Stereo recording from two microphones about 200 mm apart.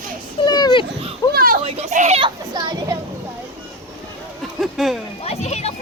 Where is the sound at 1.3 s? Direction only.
50° right (ahead or behind).